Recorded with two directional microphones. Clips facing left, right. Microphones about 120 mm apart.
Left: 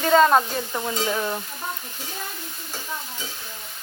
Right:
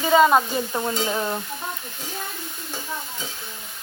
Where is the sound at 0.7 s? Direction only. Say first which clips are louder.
Left 1 dB; 20° right (ahead or behind).